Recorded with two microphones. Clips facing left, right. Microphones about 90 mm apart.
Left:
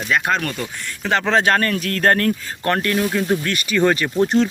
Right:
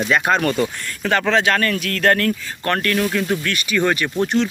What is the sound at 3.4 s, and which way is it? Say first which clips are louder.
Speech: even; 35° left (ahead or behind).